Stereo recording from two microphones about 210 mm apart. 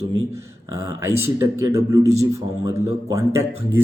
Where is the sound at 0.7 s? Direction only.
15° right (ahead or behind).